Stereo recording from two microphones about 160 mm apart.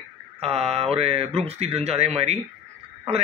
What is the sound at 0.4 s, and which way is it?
Speech, 40° right (ahead or behind).